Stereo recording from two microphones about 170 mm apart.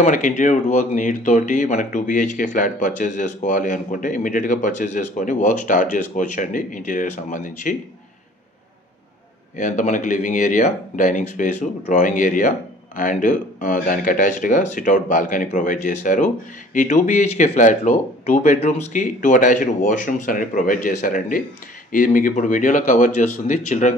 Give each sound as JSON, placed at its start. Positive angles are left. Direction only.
{"t": 0.0, "sound": "speech", "side_deg": 50}
{"t": 9.6, "sound": "speech", "side_deg": 50}